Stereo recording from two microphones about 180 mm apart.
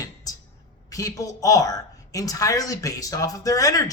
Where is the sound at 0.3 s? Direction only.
20° left (ahead or behind).